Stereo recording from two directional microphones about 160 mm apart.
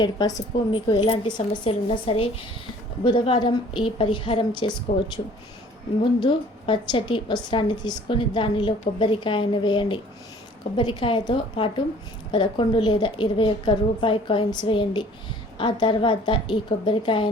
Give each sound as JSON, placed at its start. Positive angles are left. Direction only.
{"t": 0.0, "sound": "a woman's voice", "side_deg": 25}
{"t": 4.9, "sound": "speech", "side_deg": 50}
{"t": 6.0, "sound": "a woman's voice", "side_deg": 30}